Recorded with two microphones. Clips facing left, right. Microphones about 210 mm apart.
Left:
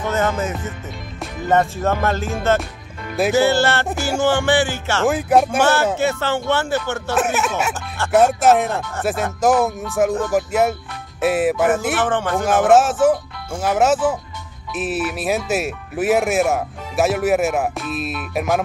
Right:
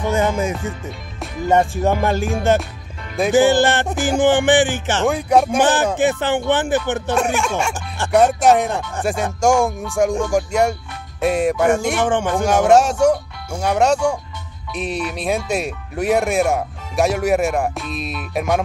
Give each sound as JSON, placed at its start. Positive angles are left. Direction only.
{"t": 0.0, "sound": "speech", "side_deg": -15}
{"t": 5.0, "sound": "speech", "side_deg": 0}
{"t": 5.6, "sound": "speech", "side_deg": -15}
{"t": 7.2, "sound": "speech", "side_deg": 5}
{"t": 12.0, "sound": "speech", "side_deg": -15}
{"t": 12.4, "sound": "speech", "side_deg": 0}